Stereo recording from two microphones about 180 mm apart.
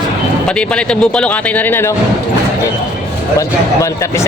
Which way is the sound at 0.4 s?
5° left (ahead or behind).